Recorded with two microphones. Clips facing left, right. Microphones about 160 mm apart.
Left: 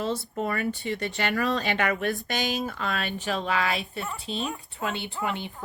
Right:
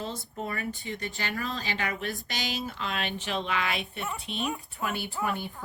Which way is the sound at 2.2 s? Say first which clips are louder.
Left 5 dB; 50° left (ahead or behind).